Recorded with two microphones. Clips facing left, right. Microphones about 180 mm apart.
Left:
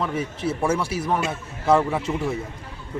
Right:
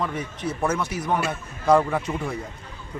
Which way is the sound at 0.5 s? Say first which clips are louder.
Left 1 dB; 10° left (ahead or behind).